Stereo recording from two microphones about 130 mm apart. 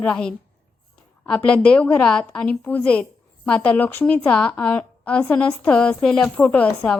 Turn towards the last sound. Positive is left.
turn(degrees=10)  # may be behind; listen again after turning